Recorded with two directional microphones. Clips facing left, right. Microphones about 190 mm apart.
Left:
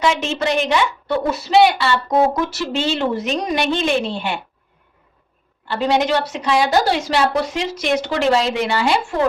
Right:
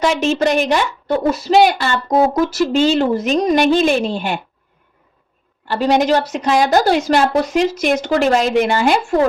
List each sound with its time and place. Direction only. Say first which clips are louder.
0.0 s a woman's voice: right 4 dB; 45° right (ahead or behind)
5.6 s a woman's voice: right 3 dB; 45° right (ahead or behind)